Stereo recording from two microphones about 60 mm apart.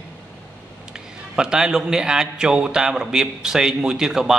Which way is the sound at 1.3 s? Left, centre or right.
Centre.